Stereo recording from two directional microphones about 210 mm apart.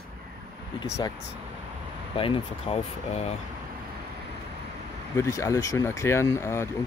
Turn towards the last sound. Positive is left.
turn(degrees=10)  # may be behind; listen again after turning